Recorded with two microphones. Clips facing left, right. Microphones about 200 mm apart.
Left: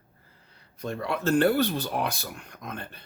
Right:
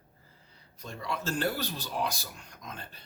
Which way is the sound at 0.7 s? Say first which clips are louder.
Left 7 dB; 60° left (ahead or behind).